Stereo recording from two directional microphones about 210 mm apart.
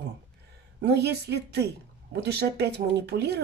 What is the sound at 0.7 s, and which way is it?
Speech, 55° right (ahead or behind).